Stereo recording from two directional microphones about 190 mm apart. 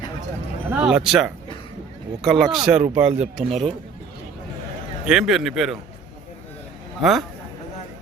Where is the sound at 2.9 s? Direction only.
40° right (ahead or behind).